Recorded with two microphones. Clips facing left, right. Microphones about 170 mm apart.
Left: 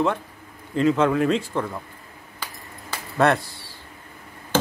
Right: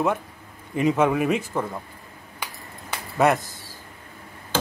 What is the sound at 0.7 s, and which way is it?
A man's voice, 15° right (ahead or behind).